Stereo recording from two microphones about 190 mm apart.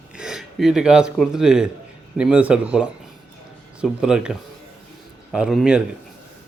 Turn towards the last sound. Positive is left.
turn(degrees=-5)  # may be behind; listen again after turning